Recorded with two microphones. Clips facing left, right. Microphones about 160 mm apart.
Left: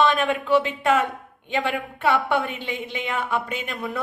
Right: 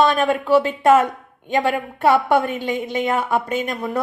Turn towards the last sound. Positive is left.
turn(degrees=-40)  # may be behind; listen again after turning